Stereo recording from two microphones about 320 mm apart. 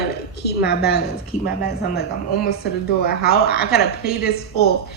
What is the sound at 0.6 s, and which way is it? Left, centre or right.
A woman's voice, left.